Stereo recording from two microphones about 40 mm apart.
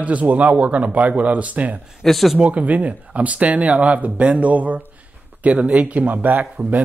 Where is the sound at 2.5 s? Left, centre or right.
Right.